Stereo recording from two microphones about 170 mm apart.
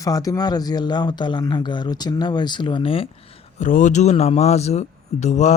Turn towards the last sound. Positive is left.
turn(degrees=45)  # may be behind; listen again after turning